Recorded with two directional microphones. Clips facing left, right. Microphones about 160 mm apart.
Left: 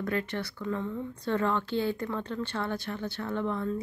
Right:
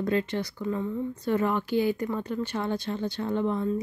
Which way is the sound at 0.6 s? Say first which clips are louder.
Right 3 dB; 10° right (ahead or behind).